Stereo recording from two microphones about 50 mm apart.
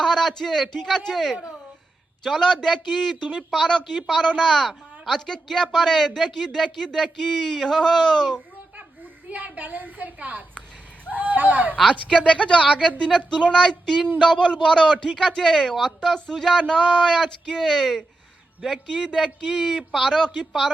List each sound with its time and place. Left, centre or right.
0.0 s speech: centre
9.3 s a woman's voice: right
12.2 s speech: left; by 18.0 s centre
19.0 s speech: centre
19.5 s speech: centre